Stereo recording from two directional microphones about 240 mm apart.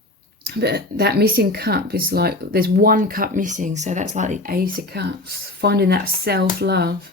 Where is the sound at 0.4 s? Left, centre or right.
Right.